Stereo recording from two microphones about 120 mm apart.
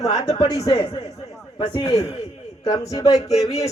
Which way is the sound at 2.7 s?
30° left (ahead or behind).